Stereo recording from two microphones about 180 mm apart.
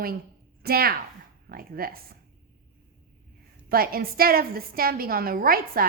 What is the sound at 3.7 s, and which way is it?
A woman's voice, 55° right (ahead or behind).